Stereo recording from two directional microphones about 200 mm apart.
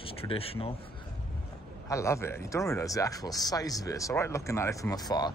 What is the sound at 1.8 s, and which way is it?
Speech, 15° left (ahead or behind).